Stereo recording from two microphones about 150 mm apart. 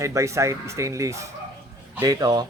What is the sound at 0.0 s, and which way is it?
Speech, 20° right (ahead or behind).